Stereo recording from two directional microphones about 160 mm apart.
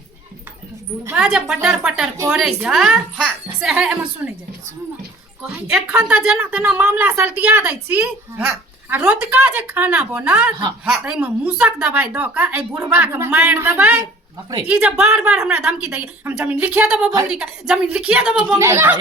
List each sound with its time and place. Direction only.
1.0 s a woman's voice: 10° right (ahead or behind)
2.3 s a woman's voice: centre (ahead or behind)
5.7 s a woman's voice: 10° right (ahead or behind)